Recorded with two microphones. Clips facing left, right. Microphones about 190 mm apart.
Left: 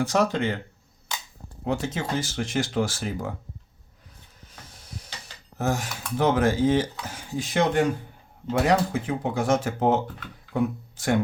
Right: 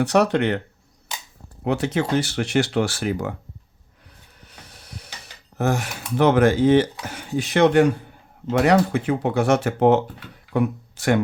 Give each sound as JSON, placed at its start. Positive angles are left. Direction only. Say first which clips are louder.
{"t": 0.0, "sound": "speech", "louder": "right 5 dB", "side_deg": -70}
{"t": 1.6, "sound": "speech", "louder": "right 5 dB", "side_deg": -70}
{"t": 4.4, "sound": "a sound", "louder": "right 1 dB", "side_deg": -65}
{"t": 5.5, "sound": "speech", "louder": "right 4 dB", "side_deg": -65}